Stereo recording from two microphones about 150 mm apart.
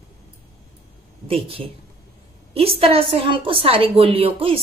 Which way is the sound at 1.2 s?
40° right (ahead or behind).